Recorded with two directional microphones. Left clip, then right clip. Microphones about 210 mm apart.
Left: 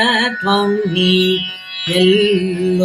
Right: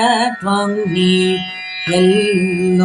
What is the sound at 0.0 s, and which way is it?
Music, 25° right (ahead or behind).